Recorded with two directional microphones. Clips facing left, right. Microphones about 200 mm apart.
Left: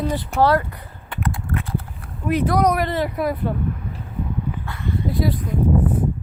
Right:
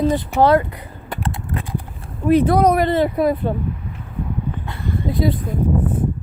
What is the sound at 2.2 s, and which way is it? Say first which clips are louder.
Speech: right 5 dB; 30° right (ahead or behind).